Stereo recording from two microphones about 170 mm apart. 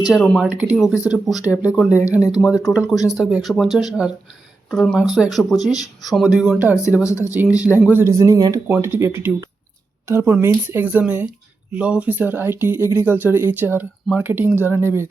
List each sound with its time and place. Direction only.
0.0 s speech: centre (ahead or behind)